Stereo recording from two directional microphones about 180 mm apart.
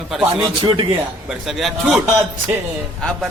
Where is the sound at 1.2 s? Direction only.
Centre (ahead or behind).